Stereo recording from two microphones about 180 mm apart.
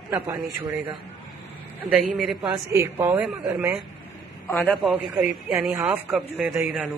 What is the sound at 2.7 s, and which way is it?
Speech, 15° right (ahead or behind).